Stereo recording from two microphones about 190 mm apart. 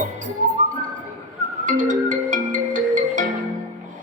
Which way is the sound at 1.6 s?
40° right (ahead or behind).